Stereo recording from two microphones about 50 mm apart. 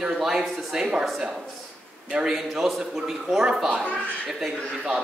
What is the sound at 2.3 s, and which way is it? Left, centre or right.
A man's voice, centre.